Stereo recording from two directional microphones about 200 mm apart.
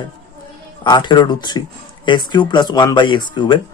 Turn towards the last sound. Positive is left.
turn(degrees=20)  # may be behind; listen again after turning